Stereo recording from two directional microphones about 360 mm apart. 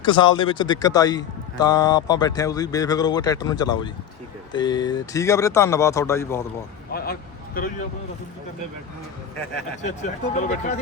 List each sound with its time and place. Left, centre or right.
0.0 s speech: centre
6.9 s speech: left
10.0 s speech: centre